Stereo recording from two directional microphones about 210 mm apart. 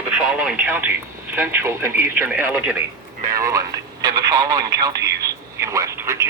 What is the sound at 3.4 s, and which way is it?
Radio, 15° right (ahead or behind).